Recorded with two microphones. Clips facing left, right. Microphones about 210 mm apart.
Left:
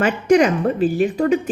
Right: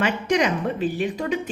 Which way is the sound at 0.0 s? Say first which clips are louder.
Left 7 dB; 50° left (ahead or behind).